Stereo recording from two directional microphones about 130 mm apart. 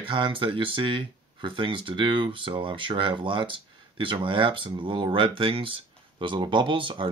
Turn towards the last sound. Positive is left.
turn(degrees=-40)  # may be behind; listen again after turning